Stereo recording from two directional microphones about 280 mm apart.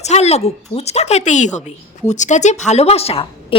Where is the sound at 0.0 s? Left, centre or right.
Left.